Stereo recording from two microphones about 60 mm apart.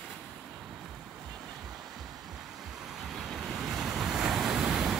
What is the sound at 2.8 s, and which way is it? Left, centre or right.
Waves, centre.